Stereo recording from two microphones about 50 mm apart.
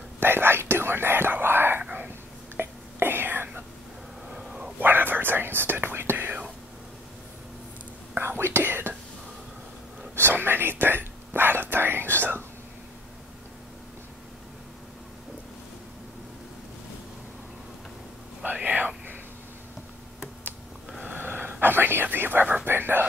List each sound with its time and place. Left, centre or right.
0.2 s whispering: right
1.8 s whispering: right
2.5 s whispering: right
4.3 s dog: centre
4.7 s whispering: right
8.2 s whispering: right
10.1 s whispering: right
18.4 s whispering: right
21.0 s whispering: right